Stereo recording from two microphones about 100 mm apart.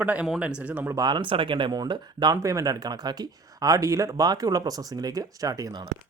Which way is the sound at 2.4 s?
35° right (ahead or behind).